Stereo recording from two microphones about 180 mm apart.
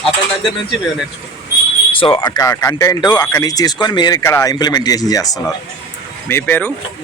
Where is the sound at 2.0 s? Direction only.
30° left (ahead or behind); by 6.7 s 10° left (ahead or behind).